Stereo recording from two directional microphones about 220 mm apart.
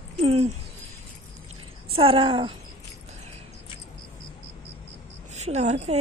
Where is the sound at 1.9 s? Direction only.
25° right (ahead or behind).